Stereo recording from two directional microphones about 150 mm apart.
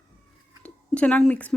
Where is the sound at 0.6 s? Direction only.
10° left (ahead or behind).